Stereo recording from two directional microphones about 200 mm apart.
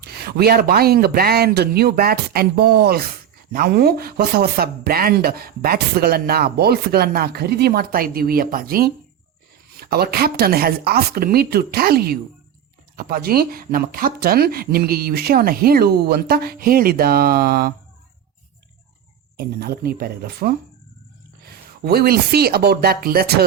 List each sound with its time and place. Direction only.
0.0 s speech: 50° right (ahead or behind)
19.4 s speech: 50° right (ahead or behind)